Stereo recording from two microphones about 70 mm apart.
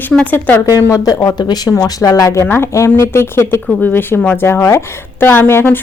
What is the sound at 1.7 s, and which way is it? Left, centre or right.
Speech, left.